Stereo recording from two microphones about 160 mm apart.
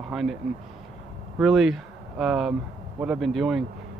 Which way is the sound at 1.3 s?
Centre (ahead or behind).